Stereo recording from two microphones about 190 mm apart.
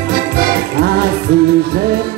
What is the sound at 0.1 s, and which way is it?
Music, 55° right (ahead or behind).